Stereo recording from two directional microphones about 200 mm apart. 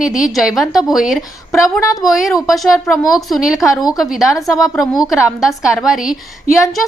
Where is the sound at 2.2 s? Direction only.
Centre (ahead or behind).